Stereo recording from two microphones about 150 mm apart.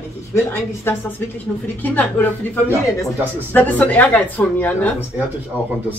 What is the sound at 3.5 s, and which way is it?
A woman's voice, 10° left (ahead or behind).